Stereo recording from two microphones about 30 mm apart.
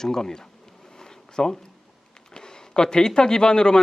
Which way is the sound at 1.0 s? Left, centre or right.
Left.